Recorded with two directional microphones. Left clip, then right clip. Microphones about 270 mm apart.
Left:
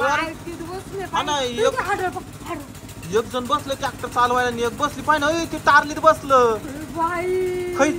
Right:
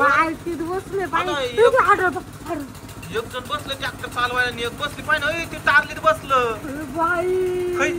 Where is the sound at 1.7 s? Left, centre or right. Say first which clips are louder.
Right 7 dB; centre.